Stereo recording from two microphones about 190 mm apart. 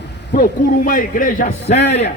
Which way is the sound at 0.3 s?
45° left (ahead or behind).